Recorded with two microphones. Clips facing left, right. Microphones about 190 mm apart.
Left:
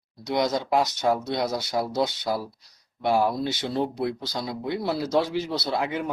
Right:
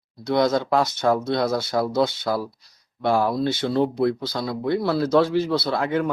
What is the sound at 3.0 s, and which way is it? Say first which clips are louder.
Speech: right 2 dB; 50° right (ahead or behind).